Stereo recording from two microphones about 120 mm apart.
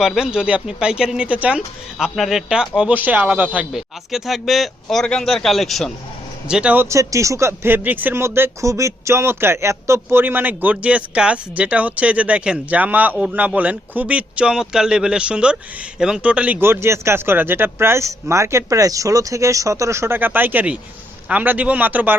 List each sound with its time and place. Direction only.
0.0 s speech: 5° right (ahead or behind)
6.5 s speech: 10° right (ahead or behind)
6.9 s speech: 25° right (ahead or behind)